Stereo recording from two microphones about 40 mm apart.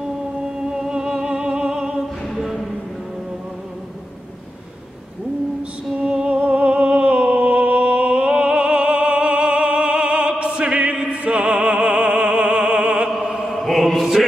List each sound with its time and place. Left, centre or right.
0.0 s music: centre
2.3 s a sound: centre
5.9 s music: right
11.1 s opera: right
13.2 s mantra: right
13.5 s mantra: centre